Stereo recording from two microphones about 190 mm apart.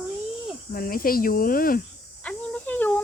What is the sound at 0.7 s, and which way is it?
Speech, 50° left (ahead or behind).